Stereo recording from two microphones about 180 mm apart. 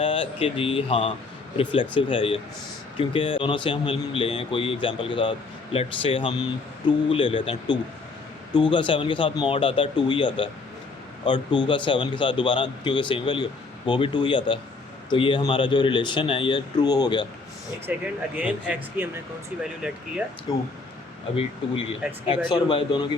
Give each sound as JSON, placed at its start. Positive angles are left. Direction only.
{"t": 0.0, "sound": "speech", "side_deg": 30}
{"t": 17.9, "sound": "speech", "side_deg": -10}
{"t": 20.5, "sound": "speech", "side_deg": 20}
{"t": 22.4, "sound": "speech", "side_deg": 25}